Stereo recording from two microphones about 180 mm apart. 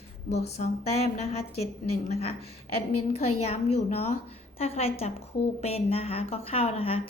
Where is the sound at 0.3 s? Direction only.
35° left (ahead or behind).